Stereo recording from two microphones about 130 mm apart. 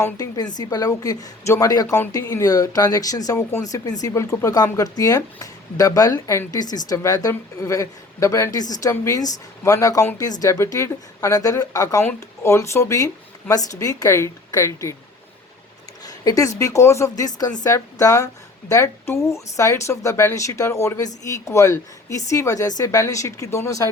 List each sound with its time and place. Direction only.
0.0 s speech: 30° left (ahead or behind)
16.0 s speech: 25° left (ahead or behind)